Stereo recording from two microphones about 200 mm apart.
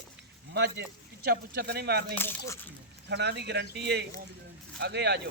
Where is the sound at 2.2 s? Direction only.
10° left (ahead or behind).